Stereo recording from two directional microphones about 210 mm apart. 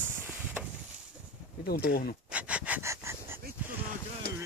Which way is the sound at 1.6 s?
50° left (ahead or behind).